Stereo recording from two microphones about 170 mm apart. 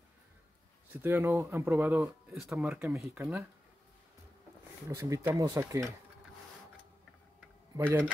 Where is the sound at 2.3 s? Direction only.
Centre (ahead or behind).